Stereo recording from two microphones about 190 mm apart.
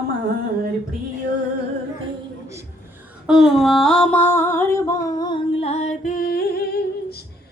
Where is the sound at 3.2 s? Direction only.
Centre (ahead or behind).